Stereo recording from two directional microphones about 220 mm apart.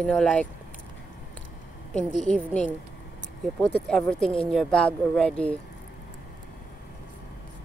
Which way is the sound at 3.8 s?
5° left (ahead or behind).